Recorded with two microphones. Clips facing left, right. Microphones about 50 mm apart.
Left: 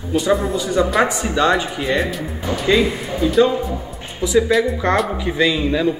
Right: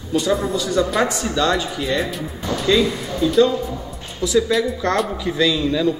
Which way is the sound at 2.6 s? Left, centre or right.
Centre.